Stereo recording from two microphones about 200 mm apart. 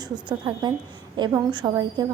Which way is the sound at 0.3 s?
20° right (ahead or behind).